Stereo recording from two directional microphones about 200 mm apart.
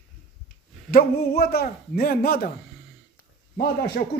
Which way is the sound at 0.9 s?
50° left (ahead or behind).